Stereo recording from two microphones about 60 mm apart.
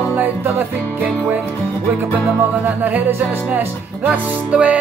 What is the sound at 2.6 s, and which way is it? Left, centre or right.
Music, right.